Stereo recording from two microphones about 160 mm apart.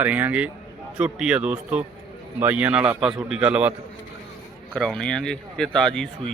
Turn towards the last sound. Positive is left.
turn(degrees=5)  # may be behind; listen again after turning